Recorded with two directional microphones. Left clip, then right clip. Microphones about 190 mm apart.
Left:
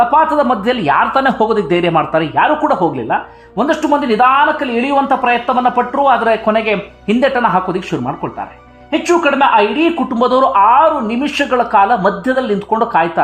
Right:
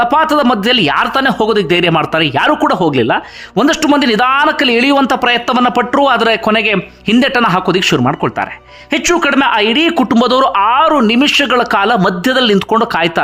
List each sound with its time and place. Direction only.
0.1 s speech: 25° right (ahead or behind)